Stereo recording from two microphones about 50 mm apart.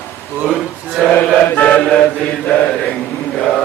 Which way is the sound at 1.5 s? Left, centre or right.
Left.